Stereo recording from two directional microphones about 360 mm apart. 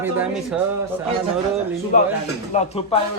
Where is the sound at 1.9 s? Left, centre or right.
Centre.